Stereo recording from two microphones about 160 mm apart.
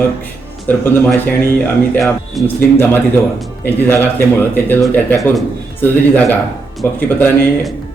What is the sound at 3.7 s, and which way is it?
Speech, 10° left (ahead or behind).